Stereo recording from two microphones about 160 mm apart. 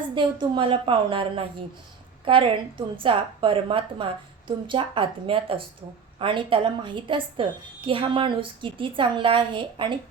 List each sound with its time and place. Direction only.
0.1 s a woman's voice: 30° right (ahead or behind)